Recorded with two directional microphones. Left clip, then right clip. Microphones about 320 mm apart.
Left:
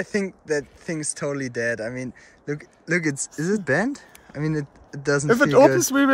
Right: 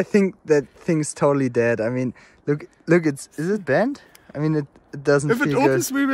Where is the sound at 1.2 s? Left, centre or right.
Centre.